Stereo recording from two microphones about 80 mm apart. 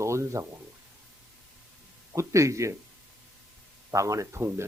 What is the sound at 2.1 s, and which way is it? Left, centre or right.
Speech, right.